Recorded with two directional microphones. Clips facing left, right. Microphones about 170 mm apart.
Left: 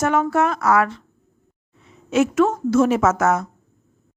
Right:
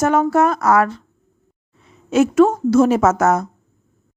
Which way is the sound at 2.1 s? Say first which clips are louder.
Right 4 dB; 35° right (ahead or behind).